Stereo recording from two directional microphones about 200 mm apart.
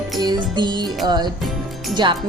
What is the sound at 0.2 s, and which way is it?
Speech, 20° right (ahead or behind).